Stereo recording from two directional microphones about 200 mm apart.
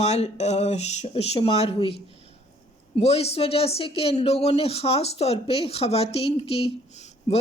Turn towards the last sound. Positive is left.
turn(degrees=30)  # may be behind; listen again after turning